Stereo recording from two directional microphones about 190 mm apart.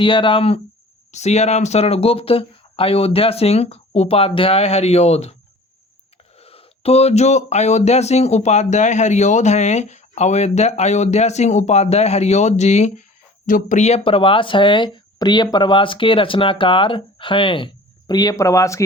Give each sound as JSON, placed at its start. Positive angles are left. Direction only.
{"t": 0.0, "sound": "speech", "side_deg": 25}
{"t": 6.3, "sound": "speech", "side_deg": 30}